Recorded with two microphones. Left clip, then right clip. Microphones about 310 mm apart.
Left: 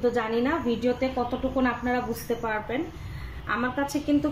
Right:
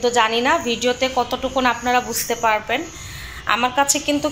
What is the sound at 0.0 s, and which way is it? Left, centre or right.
A woman's voice, right.